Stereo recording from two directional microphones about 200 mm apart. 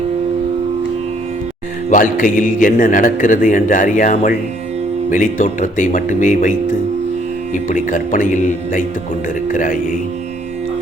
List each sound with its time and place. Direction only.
1.9 s a man's voice: 45° left (ahead or behind)
7.7 s a man's voice: 40° left (ahead or behind)